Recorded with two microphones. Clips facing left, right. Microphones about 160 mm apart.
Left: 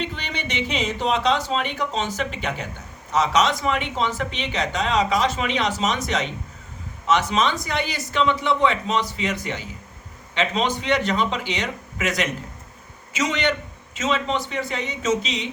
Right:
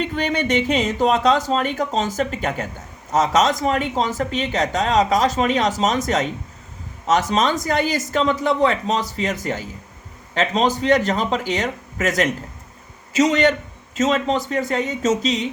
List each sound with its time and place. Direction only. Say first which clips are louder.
0.0 s speech: right 8 dB; 50° right (ahead or behind)